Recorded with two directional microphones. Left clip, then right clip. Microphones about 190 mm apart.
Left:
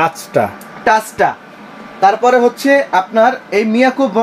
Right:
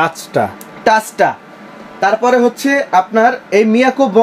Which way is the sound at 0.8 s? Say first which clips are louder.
Right 1 dB; 65° right (ahead or behind).